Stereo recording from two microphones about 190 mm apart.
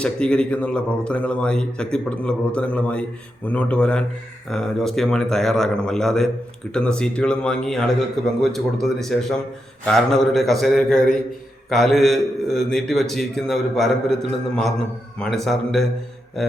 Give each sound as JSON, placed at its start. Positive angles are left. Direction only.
{"t": 0.0, "sound": "a man's voice", "side_deg": 5}